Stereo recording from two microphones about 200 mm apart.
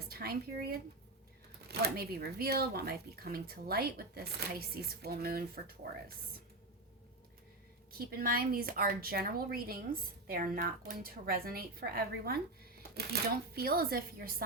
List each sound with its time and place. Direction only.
0.1 s speech: 50° right (ahead or behind)
7.9 s speech: 50° right (ahead or behind)